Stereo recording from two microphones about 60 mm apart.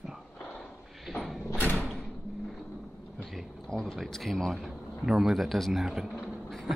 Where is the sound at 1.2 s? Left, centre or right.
Centre.